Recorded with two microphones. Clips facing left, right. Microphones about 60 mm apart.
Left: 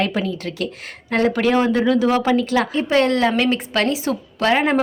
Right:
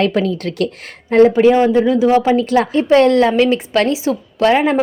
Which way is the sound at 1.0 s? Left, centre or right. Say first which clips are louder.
Right 9 dB; right.